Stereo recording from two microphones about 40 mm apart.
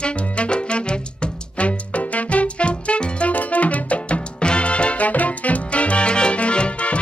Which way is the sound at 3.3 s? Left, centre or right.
Left.